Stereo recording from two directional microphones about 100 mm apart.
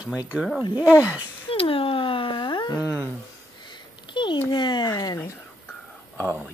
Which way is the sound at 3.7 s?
50° left (ahead or behind).